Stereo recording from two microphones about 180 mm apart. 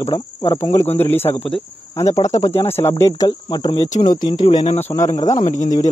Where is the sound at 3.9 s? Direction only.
45° left (ahead or behind).